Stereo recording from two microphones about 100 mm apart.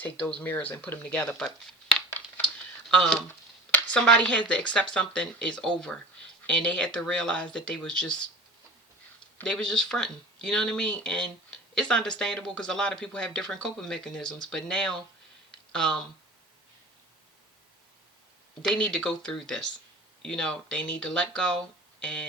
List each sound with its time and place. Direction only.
0.0 s speech: 15° left (ahead or behind)
2.0 s a sound: 15° left (ahead or behind)
2.9 s speech: 5° left (ahead or behind)
9.4 s speech: 5° left (ahead or behind)
18.6 s speech: 10° left (ahead or behind)